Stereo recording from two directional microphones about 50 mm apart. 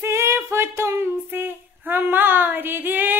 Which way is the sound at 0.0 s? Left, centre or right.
Right.